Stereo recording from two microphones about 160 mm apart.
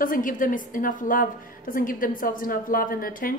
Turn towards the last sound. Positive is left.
turn(degrees=60)  # may be behind; listen again after turning